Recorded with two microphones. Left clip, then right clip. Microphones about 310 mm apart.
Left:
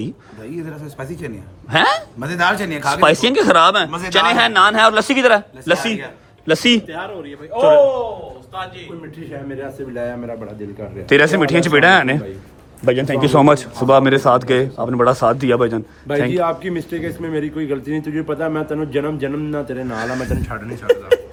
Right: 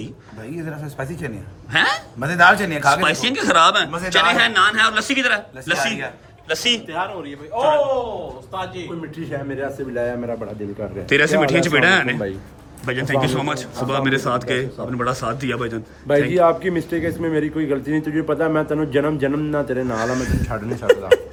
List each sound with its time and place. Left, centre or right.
0.0 s a man's voice: centre
3.8 s a man's voice: centre
4.1 s a man's voice: centre
6.5 s a man's voice: left
6.9 s a man's voice: centre
7.5 s a man's voice: centre
9.3 s a man's voice: centre